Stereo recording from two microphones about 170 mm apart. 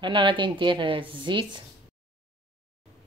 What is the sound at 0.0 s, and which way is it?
A woman's voice, 30° right (ahead or behind).